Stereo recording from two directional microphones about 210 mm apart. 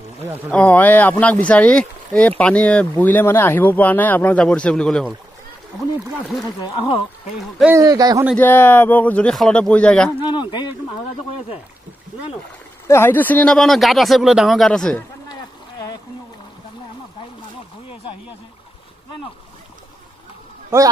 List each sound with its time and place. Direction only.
0.5 s speech: 5° left (ahead or behind)
6.4 s speech: 20° left (ahead or behind)
7.7 s speech: 15° right (ahead or behind)
8.4 s speech: 10° left (ahead or behind)
10.2 s speech: 20° left (ahead or behind)
12.8 s speech: 10° left (ahead or behind)
15.2 s a sound: 20° left (ahead or behind)
20.7 s a man's voice: 10° right (ahead or behind)